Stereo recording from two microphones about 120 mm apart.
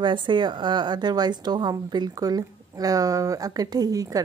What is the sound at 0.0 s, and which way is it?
A woman's voice, 40° right (ahead or behind).